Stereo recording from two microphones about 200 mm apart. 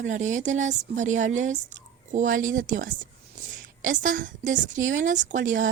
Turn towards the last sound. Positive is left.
turn(degrees=-40)  # may be behind; listen again after turning